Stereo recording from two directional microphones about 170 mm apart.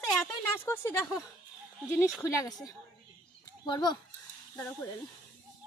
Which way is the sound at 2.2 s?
20° left (ahead or behind).